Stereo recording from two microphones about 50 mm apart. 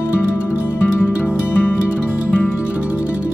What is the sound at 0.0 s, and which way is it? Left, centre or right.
Music, left.